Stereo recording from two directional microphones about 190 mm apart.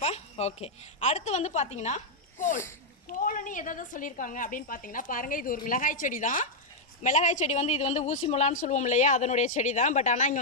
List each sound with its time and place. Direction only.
0.0 s a woman's voice: 35° left (ahead or behind)
3.1 s a woman's voice: 45° left (ahead or behind)